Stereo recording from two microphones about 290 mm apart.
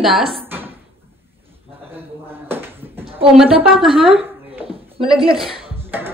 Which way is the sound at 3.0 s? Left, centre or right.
Centre.